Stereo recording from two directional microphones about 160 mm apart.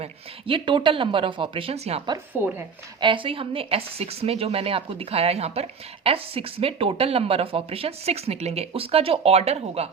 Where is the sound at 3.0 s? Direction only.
30° right (ahead or behind).